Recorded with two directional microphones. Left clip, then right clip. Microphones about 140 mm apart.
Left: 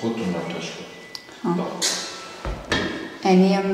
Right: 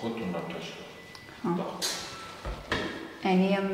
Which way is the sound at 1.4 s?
30° right (ahead or behind).